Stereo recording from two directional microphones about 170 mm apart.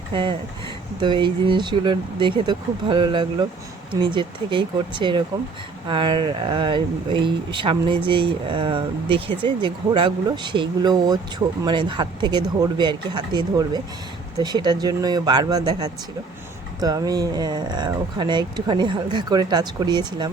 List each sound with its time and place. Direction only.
0.1 s speech: 30° right (ahead or behind)